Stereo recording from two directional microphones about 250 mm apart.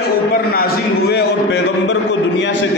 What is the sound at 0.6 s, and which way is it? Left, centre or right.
A man's voice, left.